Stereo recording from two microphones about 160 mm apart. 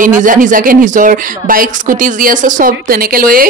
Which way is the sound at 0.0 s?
55° right (ahead or behind).